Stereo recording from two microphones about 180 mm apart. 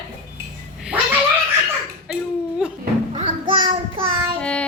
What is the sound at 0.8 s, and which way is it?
Cat, 5° right (ahead or behind).